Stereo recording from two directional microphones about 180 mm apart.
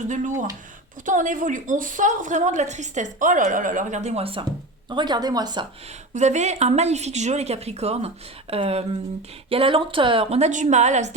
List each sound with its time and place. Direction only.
0.1 s a woman's voice: 45° right (ahead or behind); by 5.6 s 20° right (ahead or behind)
6.1 s speech: 40° right (ahead or behind)